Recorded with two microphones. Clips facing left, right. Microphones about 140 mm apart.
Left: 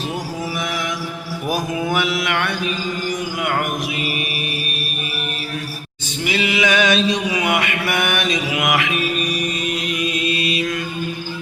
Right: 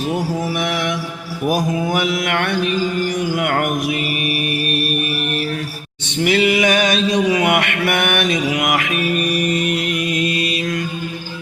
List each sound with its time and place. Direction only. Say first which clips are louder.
0.6 s mantra: right 4 dB; 65° right (ahead or behind)
1.5 s mantra: right 1 dB; 40° right (ahead or behind)
6.2 s mantra: right 5 dB; 55° right (ahead or behind)
9.3 s music: right 5 dB; 60° right (ahead or behind); by 10.8 s 40° right (ahead or behind)